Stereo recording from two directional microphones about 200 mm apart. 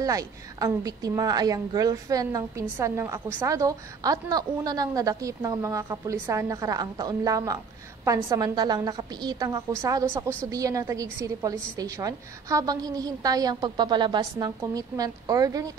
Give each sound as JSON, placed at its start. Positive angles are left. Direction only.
{"t": 0.0, "sound": "a woman's voice", "side_deg": -15}